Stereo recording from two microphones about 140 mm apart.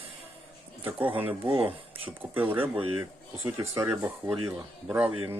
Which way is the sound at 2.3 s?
15° right (ahead or behind).